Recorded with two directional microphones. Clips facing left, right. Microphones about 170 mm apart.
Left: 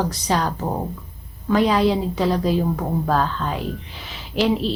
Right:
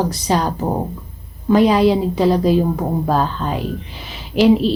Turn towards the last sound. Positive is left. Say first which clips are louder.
# right 7 dB
turn(degrees=-10)  # may be behind; listen again after turning